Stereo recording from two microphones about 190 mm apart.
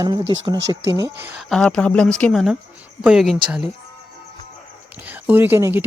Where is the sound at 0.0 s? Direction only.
25° right (ahead or behind).